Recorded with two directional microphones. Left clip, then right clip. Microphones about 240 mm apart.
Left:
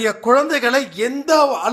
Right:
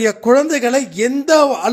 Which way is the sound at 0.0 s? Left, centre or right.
Right.